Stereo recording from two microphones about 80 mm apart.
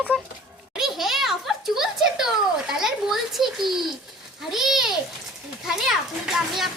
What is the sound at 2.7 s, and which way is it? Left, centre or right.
A child's voice, centre.